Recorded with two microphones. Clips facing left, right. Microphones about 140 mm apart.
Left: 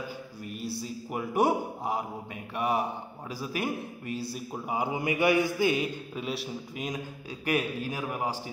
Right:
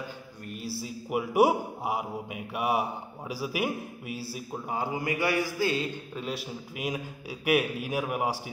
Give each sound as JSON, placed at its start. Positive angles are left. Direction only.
{"t": 0.5, "sound": "a man's voice", "side_deg": 0}
{"t": 4.6, "sound": "a man's voice", "side_deg": 20}
{"t": 6.1, "sound": "a man's voice", "side_deg": 0}